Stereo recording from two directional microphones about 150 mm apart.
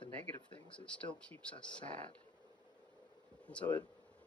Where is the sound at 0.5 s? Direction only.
10° left (ahead or behind).